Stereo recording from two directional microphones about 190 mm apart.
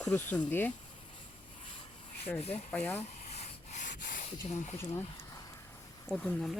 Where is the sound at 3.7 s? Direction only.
40° left (ahead or behind).